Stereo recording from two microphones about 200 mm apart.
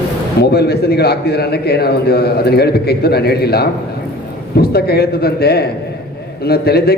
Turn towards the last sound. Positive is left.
turn(degrees=50)  # may be behind; listen again after turning